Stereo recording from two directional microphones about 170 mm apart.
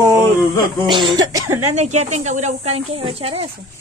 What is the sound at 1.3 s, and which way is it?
Speech, 15° right (ahead or behind).